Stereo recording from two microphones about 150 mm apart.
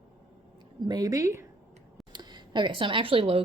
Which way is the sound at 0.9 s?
25° right (ahead or behind).